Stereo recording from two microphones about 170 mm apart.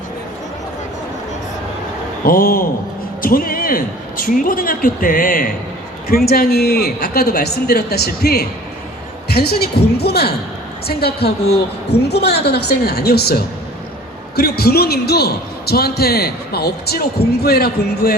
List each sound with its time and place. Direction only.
2.2 s a man's voice: 55° left (ahead or behind)